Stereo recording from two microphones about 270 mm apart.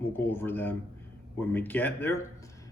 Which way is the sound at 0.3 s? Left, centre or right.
Centre.